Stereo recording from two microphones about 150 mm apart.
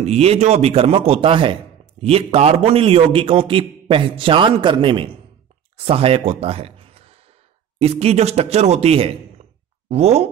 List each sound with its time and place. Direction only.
0.0 s a man's voice: 45° right (ahead or behind)